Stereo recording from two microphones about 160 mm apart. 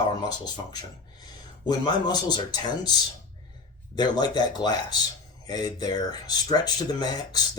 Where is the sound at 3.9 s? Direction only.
25° left (ahead or behind).